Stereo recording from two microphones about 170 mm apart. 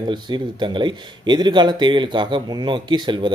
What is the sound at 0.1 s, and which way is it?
Speech, 25° right (ahead or behind).